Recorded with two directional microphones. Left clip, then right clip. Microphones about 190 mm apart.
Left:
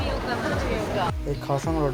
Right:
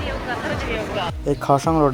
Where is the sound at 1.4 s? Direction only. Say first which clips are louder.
Right 9 dB; 45° right (ahead or behind).